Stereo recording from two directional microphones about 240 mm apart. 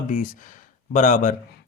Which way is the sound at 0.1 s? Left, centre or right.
Left.